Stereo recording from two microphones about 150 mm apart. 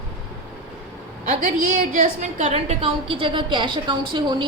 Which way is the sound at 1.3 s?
55° right (ahead or behind).